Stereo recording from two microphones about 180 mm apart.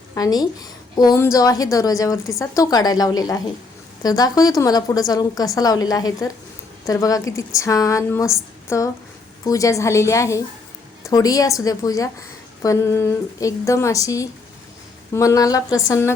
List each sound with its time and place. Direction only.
0.1 s a woman's voice: 20° left (ahead or behind)